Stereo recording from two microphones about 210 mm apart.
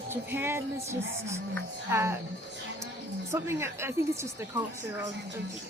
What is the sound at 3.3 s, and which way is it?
Music, 10° right (ahead or behind).